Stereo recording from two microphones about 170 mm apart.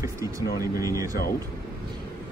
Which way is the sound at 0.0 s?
20° right (ahead or behind).